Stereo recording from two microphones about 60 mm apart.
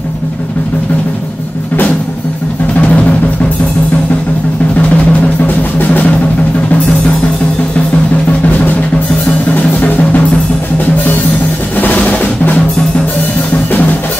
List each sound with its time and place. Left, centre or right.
2.8 s drum: left
5.6 s music: left
8.3 s drum: left
11.8 s drum: left